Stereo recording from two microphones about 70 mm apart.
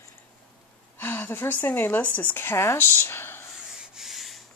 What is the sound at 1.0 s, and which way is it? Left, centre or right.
Speech, left.